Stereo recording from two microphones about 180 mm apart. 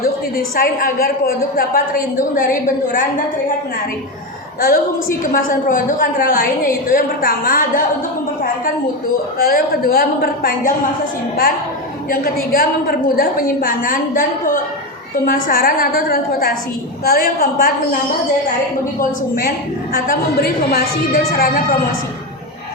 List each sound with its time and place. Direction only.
0.5 s a woman's voice: 55° left (ahead or behind)
4.6 s a woman's voice: 50° left (ahead or behind)
9.4 s a woman's voice: 55° left (ahead or behind)
12.1 s a woman's voice: 55° left (ahead or behind)
18.9 s a woman's voice: 50° left (ahead or behind)